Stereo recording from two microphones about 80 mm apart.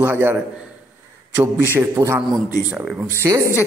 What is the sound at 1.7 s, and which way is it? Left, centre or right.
A man's voice, right.